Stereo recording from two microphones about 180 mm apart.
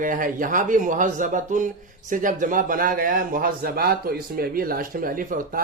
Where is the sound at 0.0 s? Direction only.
50° right (ahead or behind).